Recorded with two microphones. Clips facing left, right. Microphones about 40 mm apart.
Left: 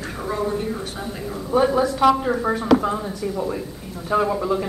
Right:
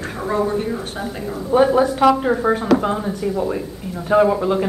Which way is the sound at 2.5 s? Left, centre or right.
Right.